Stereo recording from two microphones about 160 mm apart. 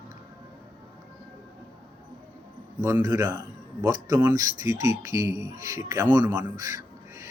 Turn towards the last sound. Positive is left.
turn(degrees=-20)  # may be behind; listen again after turning